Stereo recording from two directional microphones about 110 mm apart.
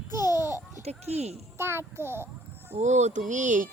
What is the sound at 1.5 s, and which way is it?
A child's voice, 20° right (ahead or behind).